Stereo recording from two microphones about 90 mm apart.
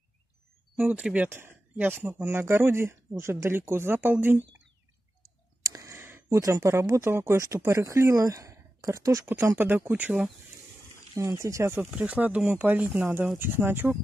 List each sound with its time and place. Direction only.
0.7 s speech: 15° right (ahead or behind)
5.6 s a sound: 35° right (ahead or behind)
6.4 s speech: 35° right (ahead or behind)
9.6 s speech: 20° right (ahead or behind)
11.1 s speech: 35° right (ahead or behind)
11.9 s speech: 15° right (ahead or behind)